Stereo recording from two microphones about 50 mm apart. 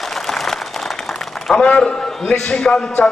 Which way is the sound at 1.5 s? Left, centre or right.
Centre.